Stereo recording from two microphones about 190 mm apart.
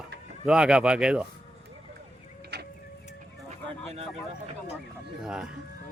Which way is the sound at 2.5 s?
60° right (ahead or behind).